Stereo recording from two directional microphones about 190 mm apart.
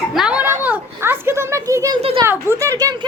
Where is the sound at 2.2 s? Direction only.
15° right (ahead or behind).